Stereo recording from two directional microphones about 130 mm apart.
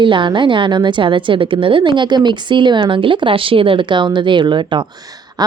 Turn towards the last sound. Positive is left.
turn(degrees=-30)  # may be behind; listen again after turning